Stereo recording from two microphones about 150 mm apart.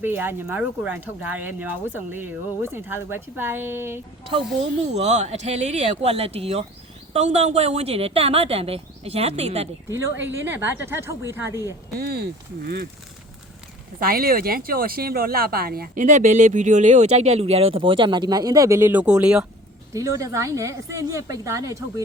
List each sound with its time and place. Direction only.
0.0 s speech: 15° right (ahead or behind)
4.9 s a woman's voice: 50° right (ahead or behind)
10.2 s speech: 15° right (ahead or behind)
11.9 s speech: 90° right
14.0 s speech: 75° right (ahead or behind); by 19.5 s 5° right (ahead or behind)
19.9 s a woman's voice: 20° right (ahead or behind)